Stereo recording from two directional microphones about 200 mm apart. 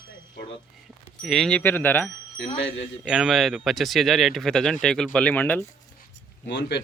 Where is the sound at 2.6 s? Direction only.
65° left (ahead or behind).